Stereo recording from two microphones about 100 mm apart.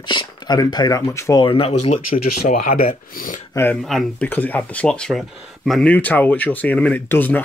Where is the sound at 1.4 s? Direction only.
70° left (ahead or behind); by 2.0 s 85° left.